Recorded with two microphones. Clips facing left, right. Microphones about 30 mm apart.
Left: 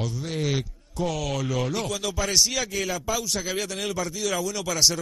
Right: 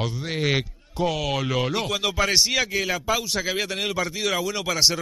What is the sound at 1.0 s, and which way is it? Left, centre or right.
Speech, right.